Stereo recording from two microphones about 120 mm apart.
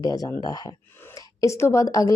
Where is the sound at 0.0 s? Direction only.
30° left (ahead or behind).